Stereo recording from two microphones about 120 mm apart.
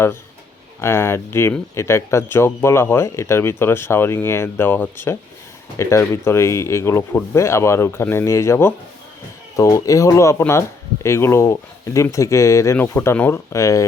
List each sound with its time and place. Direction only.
0.8 s speech: 20° left (ahead or behind)